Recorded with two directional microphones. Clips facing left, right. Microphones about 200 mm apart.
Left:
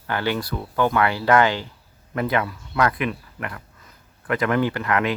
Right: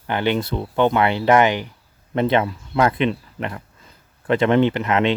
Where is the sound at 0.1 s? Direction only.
20° right (ahead or behind).